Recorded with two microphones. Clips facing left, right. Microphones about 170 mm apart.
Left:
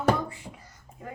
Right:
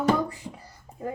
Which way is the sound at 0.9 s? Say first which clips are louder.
Right 5 dB; 35° right (ahead or behind).